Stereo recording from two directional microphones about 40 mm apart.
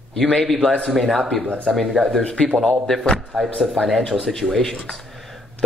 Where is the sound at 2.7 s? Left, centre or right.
Centre.